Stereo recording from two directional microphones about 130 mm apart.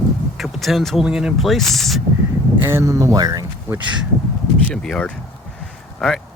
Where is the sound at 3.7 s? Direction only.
10° right (ahead or behind).